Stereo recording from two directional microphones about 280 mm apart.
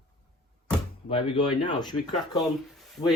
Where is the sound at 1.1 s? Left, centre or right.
Centre.